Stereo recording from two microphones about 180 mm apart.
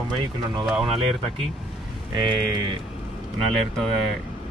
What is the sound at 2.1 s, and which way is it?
Speech, 25° right (ahead or behind).